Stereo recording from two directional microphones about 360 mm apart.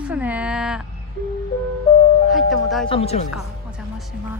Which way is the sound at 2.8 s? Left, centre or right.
Centre.